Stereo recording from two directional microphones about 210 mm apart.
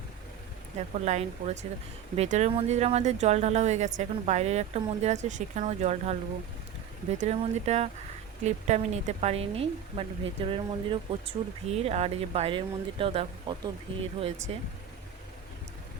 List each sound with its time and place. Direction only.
0.8 s speech: 30° right (ahead or behind)